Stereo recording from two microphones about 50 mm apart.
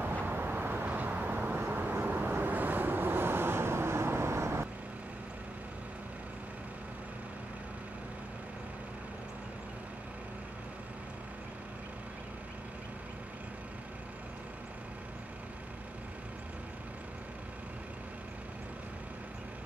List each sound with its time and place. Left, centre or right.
0.0 s vehicle: right